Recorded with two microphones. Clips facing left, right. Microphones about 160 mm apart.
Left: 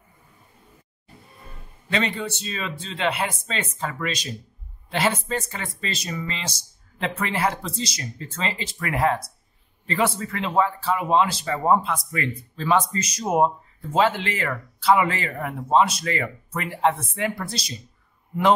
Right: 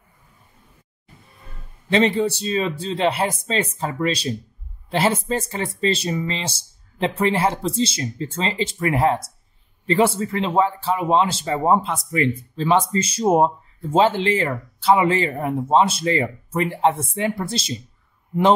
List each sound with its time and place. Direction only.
1.9 s speech: 30° right (ahead or behind)